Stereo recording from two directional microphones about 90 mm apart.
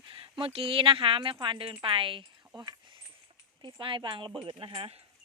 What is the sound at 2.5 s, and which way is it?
Speech, 60° right (ahead or behind).